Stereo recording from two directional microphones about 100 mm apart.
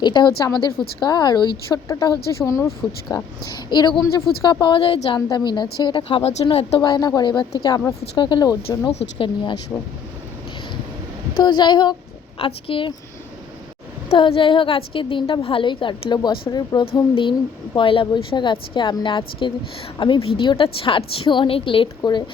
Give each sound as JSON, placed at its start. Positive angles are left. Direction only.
{"t": 0.0, "sound": "a woman's voice", "side_deg": 50}
{"t": 6.8, "sound": "a woman's voice", "side_deg": 45}
{"t": 8.9, "sound": "a woman's voice", "side_deg": 60}
{"t": 11.3, "sound": "a woman's voice", "side_deg": 45}
{"t": 12.4, "sound": "a woman's voice", "side_deg": 70}
{"t": 14.2, "sound": "a woman's voice", "side_deg": 60}
{"t": 16.8, "sound": "a woman's voice", "side_deg": 55}